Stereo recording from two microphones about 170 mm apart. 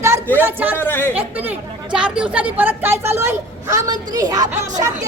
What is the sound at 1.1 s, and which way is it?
A woman's voice, 10° right (ahead or behind).